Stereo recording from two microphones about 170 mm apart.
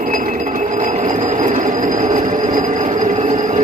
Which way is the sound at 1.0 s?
50° right (ahead or behind).